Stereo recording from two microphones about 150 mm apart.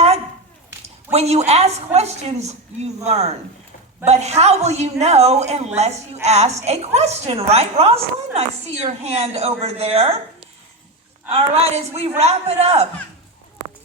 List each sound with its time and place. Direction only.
1.1 s a woman's voice: 45° right (ahead or behind)
11.3 s a woman's voice: 40° right (ahead or behind)